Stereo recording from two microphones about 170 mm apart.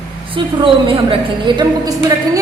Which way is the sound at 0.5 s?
30° right (ahead or behind).